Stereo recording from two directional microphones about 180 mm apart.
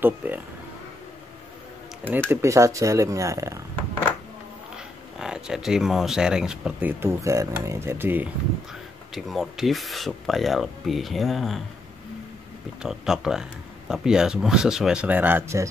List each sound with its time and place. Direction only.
0.2 s speech: 10° right (ahead or behind)
2.0 s speech: 15° right (ahead or behind)
4.7 s speech: 5° right (ahead or behind)
9.1 s speech: centre (ahead or behind)
12.8 s speech: 5° right (ahead or behind)